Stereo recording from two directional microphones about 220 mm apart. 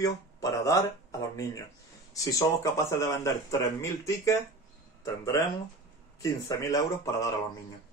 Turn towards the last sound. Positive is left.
turn(degrees=15)  # may be behind; listen again after turning